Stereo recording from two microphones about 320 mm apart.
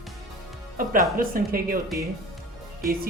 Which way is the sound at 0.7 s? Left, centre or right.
Right.